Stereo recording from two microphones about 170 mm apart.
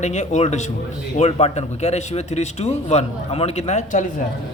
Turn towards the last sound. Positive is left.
turn(degrees=40)  # may be behind; listen again after turning